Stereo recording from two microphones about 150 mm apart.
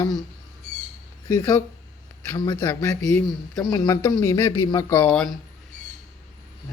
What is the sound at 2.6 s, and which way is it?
Speech, 20° left (ahead or behind).